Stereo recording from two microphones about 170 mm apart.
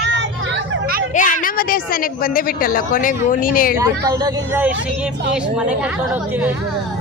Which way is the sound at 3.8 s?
20° right (ahead or behind).